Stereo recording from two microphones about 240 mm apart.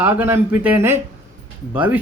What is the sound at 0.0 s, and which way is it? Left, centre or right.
Speech, centre.